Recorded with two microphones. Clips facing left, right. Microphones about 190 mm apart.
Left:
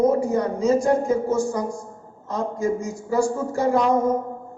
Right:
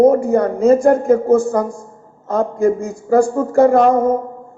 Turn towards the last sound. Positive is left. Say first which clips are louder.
# right 7 dB
turn(degrees=-55)  # may be behind; listen again after turning